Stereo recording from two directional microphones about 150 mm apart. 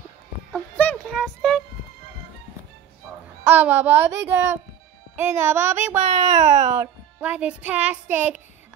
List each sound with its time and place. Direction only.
0.5 s music: 10° left (ahead or behind)
3.4 s speech: 10° right (ahead or behind)
6.0 s a child's voice: 55° right (ahead or behind)
6.8 s speech: 10° right (ahead or behind)